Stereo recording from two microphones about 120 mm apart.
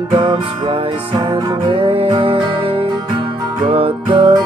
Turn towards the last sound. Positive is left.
turn(degrees=-40)  # may be behind; listen again after turning